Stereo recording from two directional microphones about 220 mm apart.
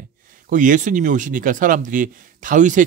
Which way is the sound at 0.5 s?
35° right (ahead or behind).